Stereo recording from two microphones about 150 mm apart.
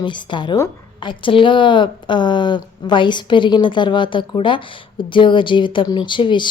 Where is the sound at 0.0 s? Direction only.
30° left (ahead or behind).